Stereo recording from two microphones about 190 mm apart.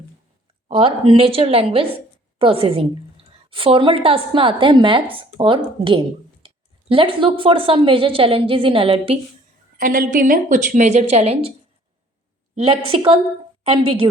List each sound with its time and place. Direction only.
0.7 s a woman's voice: 30° right (ahead or behind)
9.7 s a woman's voice: 50° right (ahead or behind); by 11.5 s 30° right (ahead or behind)
12.5 s speech: 30° right (ahead or behind)